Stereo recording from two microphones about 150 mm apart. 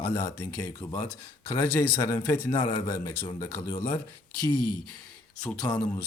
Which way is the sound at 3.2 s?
30° left (ahead or behind).